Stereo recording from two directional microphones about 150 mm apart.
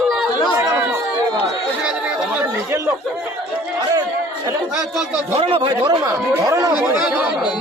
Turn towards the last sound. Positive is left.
turn(degrees=-25)  # may be behind; listen again after turning